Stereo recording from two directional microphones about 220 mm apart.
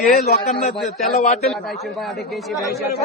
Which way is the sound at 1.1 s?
30° left (ahead or behind).